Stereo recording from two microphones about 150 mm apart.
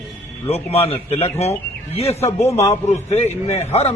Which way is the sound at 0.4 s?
45° left (ahead or behind).